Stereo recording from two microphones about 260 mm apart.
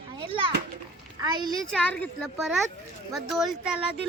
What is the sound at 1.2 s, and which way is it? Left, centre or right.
Speech, centre.